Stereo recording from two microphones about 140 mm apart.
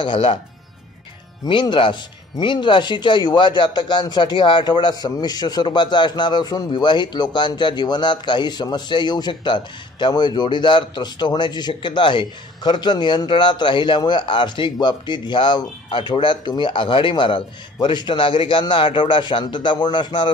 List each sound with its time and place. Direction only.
0.0 s speech: 35° left (ahead or behind)
1.4 s speech: 35° left (ahead or behind)